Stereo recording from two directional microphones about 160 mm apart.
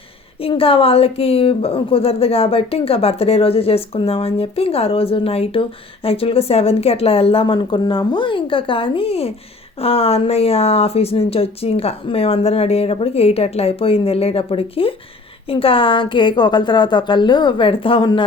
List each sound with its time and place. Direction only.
0.4 s a woman's voice: 35° left (ahead or behind)